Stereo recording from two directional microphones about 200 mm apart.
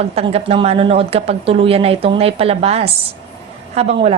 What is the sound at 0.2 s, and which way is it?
A woman's voice, 30° right (ahead or behind).